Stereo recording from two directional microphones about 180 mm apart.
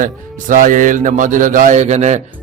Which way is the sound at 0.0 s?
45° right (ahead or behind).